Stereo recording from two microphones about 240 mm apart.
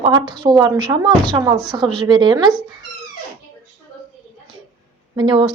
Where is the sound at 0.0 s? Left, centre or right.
Centre.